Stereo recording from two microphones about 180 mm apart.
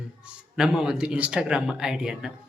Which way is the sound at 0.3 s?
5° right (ahead or behind).